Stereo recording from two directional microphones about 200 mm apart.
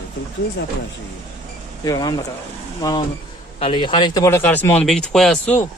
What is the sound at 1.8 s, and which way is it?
Speech, 20° left (ahead or behind).